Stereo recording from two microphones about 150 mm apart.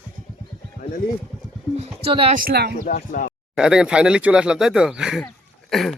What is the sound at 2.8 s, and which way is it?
Speech, 65° left (ahead or behind).